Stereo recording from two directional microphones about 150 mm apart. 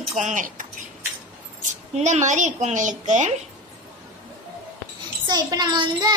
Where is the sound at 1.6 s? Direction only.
50° right (ahead or behind).